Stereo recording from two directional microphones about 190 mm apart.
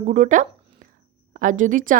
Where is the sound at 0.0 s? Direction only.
40° right (ahead or behind).